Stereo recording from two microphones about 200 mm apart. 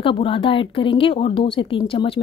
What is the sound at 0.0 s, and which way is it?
Speech, 25° left (ahead or behind).